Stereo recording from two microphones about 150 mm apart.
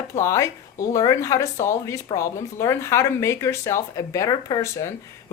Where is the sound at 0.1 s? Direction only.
20° left (ahead or behind).